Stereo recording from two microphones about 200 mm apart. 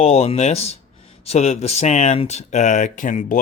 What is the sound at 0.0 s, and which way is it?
Speech, 30° left (ahead or behind).